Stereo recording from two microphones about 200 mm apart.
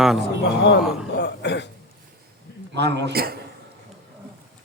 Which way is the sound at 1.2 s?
60° left (ahead or behind).